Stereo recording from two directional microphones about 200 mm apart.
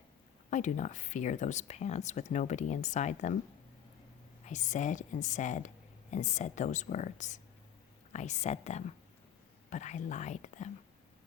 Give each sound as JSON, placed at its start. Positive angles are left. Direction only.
{"t": 0.5, "sound": "a woman's voice", "side_deg": 40}
{"t": 4.4, "sound": "a woman's voice", "side_deg": 35}